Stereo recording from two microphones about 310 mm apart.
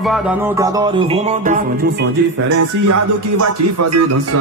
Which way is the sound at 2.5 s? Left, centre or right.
Right.